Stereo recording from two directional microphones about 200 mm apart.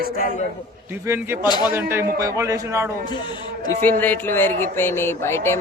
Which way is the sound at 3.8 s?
10° left (ahead or behind).